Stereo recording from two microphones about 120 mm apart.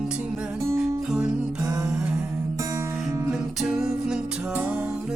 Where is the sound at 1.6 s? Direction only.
30° right (ahead or behind).